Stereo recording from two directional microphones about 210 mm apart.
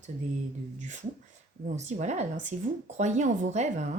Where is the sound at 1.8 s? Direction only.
35° right (ahead or behind).